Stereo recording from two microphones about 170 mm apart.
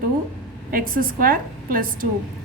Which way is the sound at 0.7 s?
55° right (ahead or behind).